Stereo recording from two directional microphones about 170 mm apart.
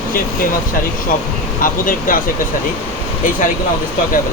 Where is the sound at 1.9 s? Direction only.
55° left (ahead or behind).